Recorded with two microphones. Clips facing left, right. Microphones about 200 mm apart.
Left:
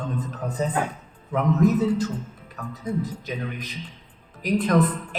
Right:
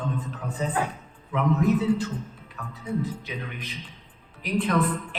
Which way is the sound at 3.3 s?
40° left (ahead or behind).